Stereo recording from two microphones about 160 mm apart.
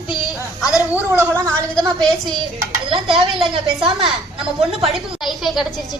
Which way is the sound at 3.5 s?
35° right (ahead or behind).